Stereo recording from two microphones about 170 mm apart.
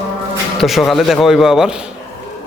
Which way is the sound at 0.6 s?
Centre (ahead or behind).